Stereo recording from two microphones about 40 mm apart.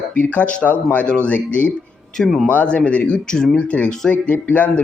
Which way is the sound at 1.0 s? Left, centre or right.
Left.